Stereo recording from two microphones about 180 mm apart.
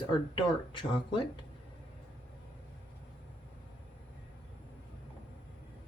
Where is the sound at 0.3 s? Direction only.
30° left (ahead or behind).